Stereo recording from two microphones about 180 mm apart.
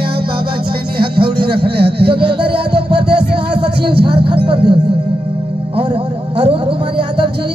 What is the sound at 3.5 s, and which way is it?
Music, 30° right (ahead or behind).